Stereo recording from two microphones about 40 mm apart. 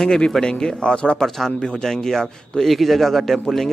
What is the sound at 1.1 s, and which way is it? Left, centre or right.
Speech, centre.